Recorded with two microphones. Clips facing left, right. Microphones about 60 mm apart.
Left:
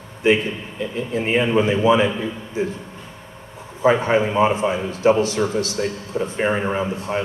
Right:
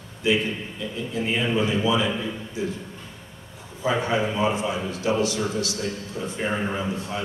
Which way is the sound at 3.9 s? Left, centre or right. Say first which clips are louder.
Left 6 dB; left.